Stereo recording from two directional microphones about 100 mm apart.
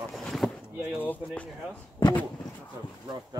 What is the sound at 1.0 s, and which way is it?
Speech, 15° left (ahead or behind).